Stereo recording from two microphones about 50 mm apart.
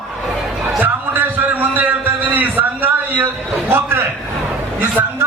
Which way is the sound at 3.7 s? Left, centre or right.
Right.